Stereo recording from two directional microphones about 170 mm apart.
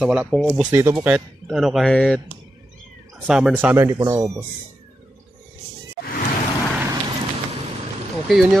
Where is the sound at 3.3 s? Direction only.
5° right (ahead or behind); by 4.4 s 20° right (ahead or behind).